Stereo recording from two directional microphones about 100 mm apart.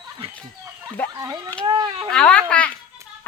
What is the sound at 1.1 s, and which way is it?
Speech, 35° right (ahead or behind).